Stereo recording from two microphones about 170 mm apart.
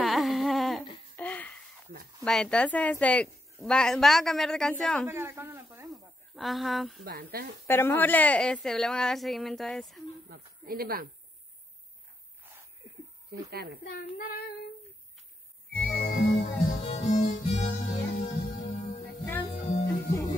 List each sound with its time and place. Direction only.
0.0 s a sound: centre (ahead or behind)
2.2 s a woman's voice: 5° left (ahead or behind)
5.0 s speech: 15° right (ahead or behind)
5.9 s a sound: centre (ahead or behind)
7.1 s speech: 60° right (ahead or behind)
7.6 s a woman's voice: 15° left (ahead or behind)
10.3 s speech: 60° right (ahead or behind)
13.3 s speech: 65° right (ahead or behind)
13.8 s child singing: 60° left (ahead or behind)
15.7 s music: 70° left (ahead or behind)
16.3 s music: 40° left (ahead or behind)
19.8 s music: 90° left